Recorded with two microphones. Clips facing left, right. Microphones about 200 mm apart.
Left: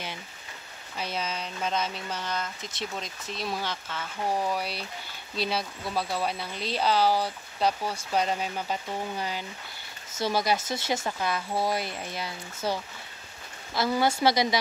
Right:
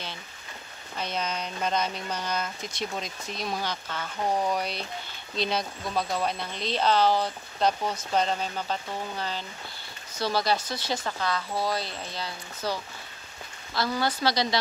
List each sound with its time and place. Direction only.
0.9 s speech: 5° left (ahead or behind)
13.7 s speech: 25° left (ahead or behind)